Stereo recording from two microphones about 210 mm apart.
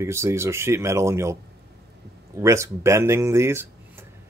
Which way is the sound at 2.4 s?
15° right (ahead or behind).